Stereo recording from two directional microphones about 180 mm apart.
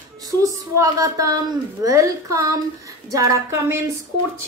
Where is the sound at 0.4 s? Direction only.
20° right (ahead or behind).